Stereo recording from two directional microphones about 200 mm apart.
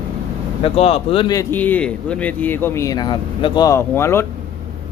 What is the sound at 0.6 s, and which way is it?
Speech, 30° left (ahead or behind).